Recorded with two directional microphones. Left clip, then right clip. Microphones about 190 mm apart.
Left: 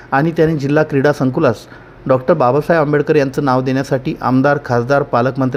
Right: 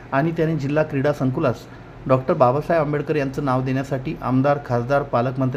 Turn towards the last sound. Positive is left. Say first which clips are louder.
# left 7 dB
turn(degrees=40)  # may be behind; listen again after turning